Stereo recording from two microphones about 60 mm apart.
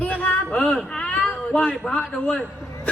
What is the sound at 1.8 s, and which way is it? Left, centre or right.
Speech, centre.